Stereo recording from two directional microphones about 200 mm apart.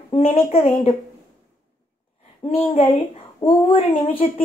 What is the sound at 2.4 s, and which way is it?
Speech, 30° left (ahead or behind).